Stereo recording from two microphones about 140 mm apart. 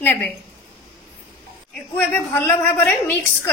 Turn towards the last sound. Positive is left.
turn(degrees=15)  # may be behind; listen again after turning